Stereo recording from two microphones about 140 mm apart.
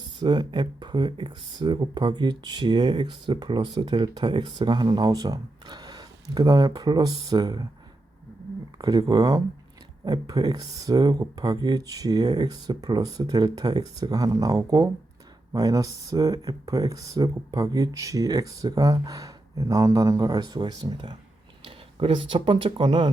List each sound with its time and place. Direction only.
0.2 s speech: 35° right (ahead or behind)
8.8 s speech: 30° right (ahead or behind)